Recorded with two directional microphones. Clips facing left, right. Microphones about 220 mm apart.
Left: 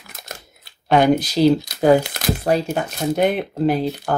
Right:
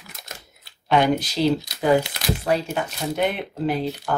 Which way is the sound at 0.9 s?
40° left (ahead or behind).